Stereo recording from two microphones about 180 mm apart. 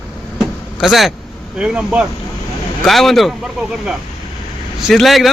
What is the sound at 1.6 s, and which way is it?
Speech, 5° right (ahead or behind).